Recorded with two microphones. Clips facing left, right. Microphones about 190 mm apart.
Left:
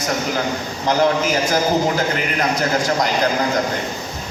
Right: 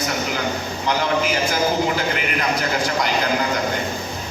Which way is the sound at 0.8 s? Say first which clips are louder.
Left 4 dB; 40° left (ahead or behind).